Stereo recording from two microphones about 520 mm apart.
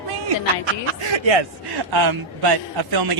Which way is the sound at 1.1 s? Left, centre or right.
Right.